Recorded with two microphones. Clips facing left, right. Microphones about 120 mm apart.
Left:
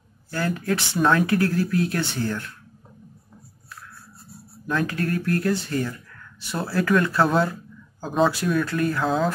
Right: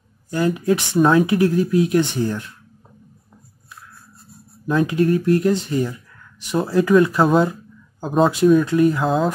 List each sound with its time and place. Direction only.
0.3 s speech: 15° right (ahead or behind)
4.6 s speech: 15° right (ahead or behind)
8.0 s speech: centre (ahead or behind)
8.6 s speech: 15° right (ahead or behind)
9.0 s speech: centre (ahead or behind)